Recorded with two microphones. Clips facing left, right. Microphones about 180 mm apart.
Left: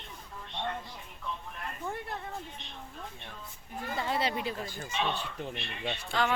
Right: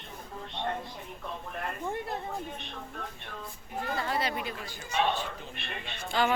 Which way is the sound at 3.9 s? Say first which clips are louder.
Left 2 dB; 20° left (ahead or behind).